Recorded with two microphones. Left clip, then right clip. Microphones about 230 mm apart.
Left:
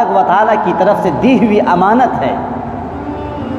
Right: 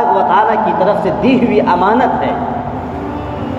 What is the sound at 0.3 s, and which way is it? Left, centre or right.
A man's voice, left.